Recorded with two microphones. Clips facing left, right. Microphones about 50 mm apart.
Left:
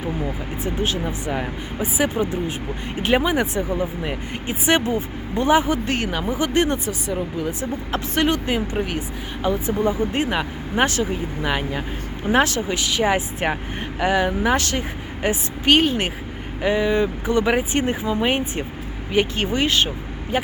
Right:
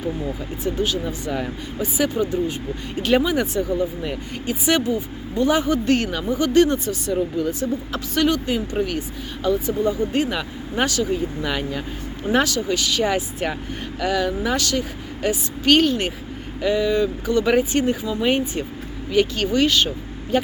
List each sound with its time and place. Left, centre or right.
0.6 s speech: left
7.1 s speech: centre
7.6 s speech: left